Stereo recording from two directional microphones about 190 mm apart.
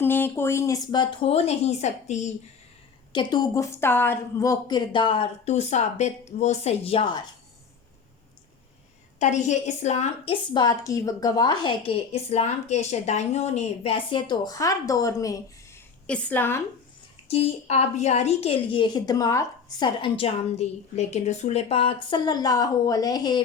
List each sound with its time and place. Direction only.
0.0 s a woman's voice: 10° left (ahead or behind); by 2.3 s 35° left (ahead or behind)
3.1 s a woman's voice: 25° left (ahead or behind)
9.1 s a woman's voice: 40° left (ahead or behind)
10.5 s a woman's voice: 20° left (ahead or behind)
11.9 s a woman's voice: 35° left (ahead or behind); by 15.8 s 15° left (ahead or behind)
16.0 s a woman's voice: 5° left (ahead or behind)
17.2 s a woman's voice: 30° left (ahead or behind)